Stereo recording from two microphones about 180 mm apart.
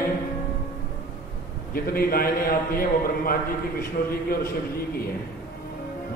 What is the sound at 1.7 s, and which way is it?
A man's voice, 55° left (ahead or behind).